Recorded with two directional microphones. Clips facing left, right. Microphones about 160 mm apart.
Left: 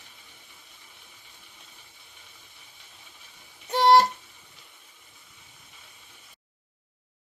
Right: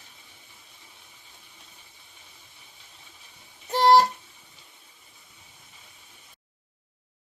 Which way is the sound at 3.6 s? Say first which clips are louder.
Even; centre (ahead or behind).